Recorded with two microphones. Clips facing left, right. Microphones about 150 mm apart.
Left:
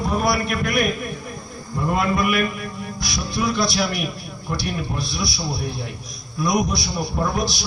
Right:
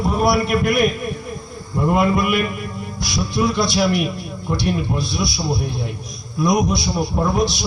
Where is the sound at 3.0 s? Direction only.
25° right (ahead or behind).